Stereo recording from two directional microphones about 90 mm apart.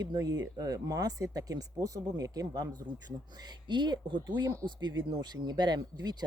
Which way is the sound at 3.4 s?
55° right (ahead or behind).